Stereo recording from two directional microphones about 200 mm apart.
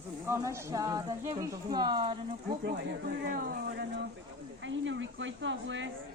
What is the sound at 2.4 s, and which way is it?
Speech, 50° right (ahead or behind).